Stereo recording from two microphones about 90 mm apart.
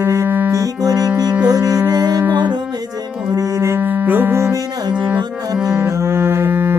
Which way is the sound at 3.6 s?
25° right (ahead or behind).